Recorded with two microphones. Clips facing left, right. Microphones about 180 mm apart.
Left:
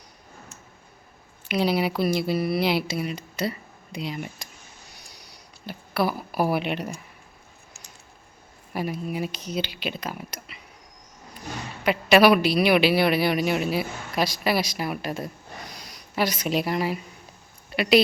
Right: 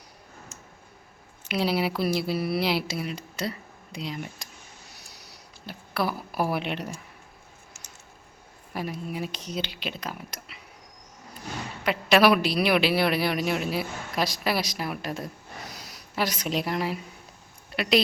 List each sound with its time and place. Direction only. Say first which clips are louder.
1.5 s a man's voice: left 2 dB; centre (ahead or behind)
4.9 s a sound: even; 5° right (ahead or behind)
8.7 s a man's voice: left 4 dB; centre (ahead or behind)
11.8 s a man's voice: left 3 dB; centre (ahead or behind)